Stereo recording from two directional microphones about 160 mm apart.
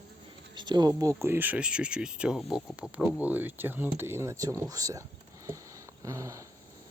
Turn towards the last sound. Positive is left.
turn(degrees=-20)  # may be behind; listen again after turning